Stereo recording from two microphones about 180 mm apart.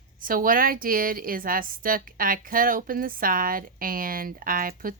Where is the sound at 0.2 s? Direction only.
50° right (ahead or behind).